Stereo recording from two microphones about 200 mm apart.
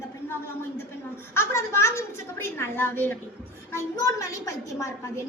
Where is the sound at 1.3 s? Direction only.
15° left (ahead or behind).